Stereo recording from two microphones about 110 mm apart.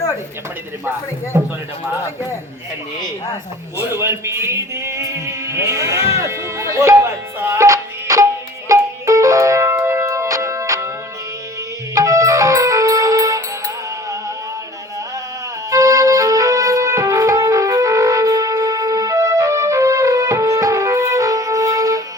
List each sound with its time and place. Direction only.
3.8 s music: 25° right (ahead or behind)
11.9 s music: 30° right (ahead or behind)
15.7 s music: 30° right (ahead or behind)